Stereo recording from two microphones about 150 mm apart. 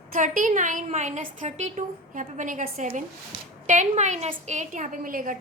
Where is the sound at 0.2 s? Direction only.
55° right (ahead or behind).